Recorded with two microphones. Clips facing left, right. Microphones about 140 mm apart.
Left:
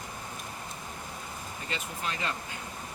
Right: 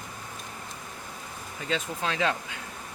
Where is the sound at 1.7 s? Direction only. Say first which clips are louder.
Right 7 dB; 90° right.